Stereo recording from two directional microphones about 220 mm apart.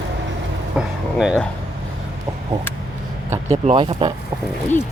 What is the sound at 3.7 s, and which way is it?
Speech, 25° right (ahead or behind).